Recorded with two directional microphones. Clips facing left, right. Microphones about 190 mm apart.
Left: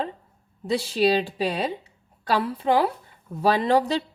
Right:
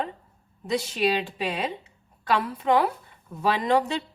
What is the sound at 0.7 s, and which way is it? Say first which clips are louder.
A woman's voice: left 3 dB; 30° left (ahead or behind).